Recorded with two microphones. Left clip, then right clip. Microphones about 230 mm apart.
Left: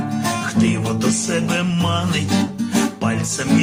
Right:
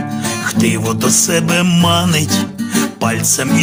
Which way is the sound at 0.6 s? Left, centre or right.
Right.